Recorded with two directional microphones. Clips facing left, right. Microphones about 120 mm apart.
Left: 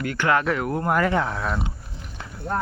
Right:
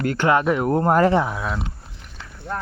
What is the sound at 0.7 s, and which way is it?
Speech, 35° right (ahead or behind).